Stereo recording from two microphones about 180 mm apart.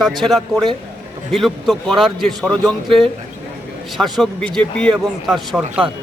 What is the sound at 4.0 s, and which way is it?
Speech, centre (ahead or behind).